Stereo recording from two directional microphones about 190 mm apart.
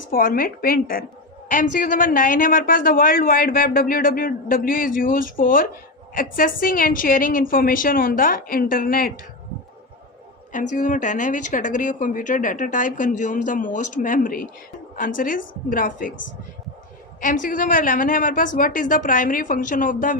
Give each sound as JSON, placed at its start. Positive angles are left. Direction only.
{"t": 0.1, "sound": "a man's voice", "side_deg": 50}
{"t": 10.5, "sound": "a man's voice", "side_deg": 40}
{"t": 17.2, "sound": "a man's voice", "side_deg": 45}